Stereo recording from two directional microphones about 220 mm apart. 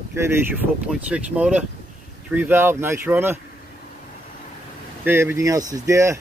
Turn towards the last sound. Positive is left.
turn(degrees=-15)  # may be behind; listen again after turning